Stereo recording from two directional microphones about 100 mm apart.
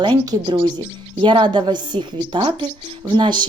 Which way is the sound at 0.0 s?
55° right (ahead or behind).